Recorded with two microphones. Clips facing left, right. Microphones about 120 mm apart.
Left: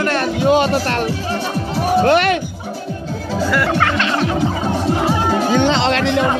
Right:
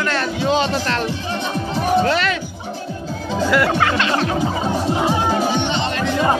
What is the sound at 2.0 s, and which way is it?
Music, 55° left (ahead or behind).